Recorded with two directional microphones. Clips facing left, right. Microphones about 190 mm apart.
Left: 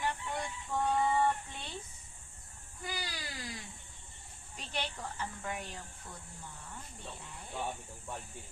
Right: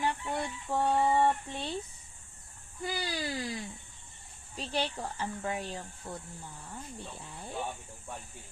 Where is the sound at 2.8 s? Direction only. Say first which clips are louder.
Right 8 dB; 30° right (ahead or behind).